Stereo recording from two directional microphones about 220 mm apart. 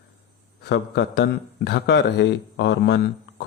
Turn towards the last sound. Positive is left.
turn(degrees=50)  # may be behind; listen again after turning